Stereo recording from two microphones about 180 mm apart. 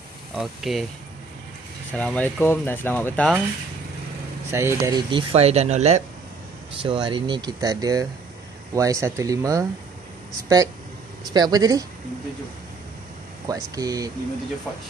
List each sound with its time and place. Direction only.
0.3 s speech: centre (ahead or behind)
1.9 s speech: 10° left (ahead or behind)
4.5 s speech: 15° right (ahead or behind)
5.1 s speech: 35° right (ahead or behind); by 9.7 s 20° right (ahead or behind)
11.3 s speech: 20° right (ahead or behind)
13.5 s speech: 20° right (ahead or behind)